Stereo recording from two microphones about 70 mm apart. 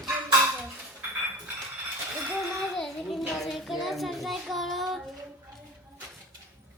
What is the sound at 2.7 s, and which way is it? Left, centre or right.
Child singing, centre.